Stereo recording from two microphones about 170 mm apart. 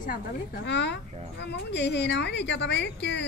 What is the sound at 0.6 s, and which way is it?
Speech, 90° left.